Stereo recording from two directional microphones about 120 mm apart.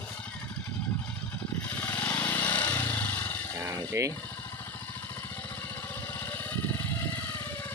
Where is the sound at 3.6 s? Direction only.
30° right (ahead or behind).